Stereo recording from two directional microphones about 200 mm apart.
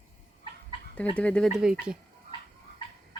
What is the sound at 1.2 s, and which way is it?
Speech, 5° left (ahead or behind).